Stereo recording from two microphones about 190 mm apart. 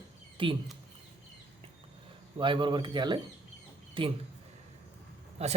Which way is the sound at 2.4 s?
25° right (ahead or behind).